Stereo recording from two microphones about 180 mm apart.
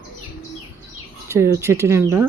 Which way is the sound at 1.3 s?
15° right (ahead or behind).